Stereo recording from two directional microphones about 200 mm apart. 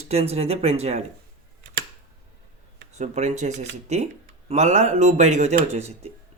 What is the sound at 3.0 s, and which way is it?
Speech, 35° right (ahead or behind).